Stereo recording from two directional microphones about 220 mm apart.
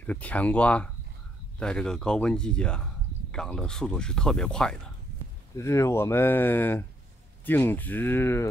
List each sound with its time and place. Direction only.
0.0 s speech: 5° left (ahead or behind)